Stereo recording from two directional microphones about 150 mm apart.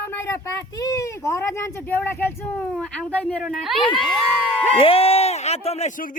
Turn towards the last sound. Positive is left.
turn(degrees=60)  # may be behind; listen again after turning